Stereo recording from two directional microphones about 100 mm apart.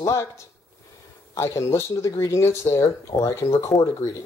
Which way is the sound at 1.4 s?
30° left (ahead or behind).